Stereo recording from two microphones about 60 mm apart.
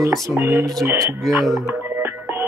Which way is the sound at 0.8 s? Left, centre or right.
Right.